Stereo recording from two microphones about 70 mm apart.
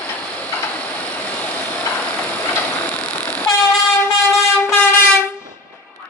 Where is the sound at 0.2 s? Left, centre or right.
Centre.